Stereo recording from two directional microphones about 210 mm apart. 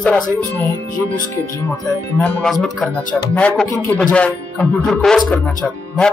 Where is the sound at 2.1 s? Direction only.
5° left (ahead or behind).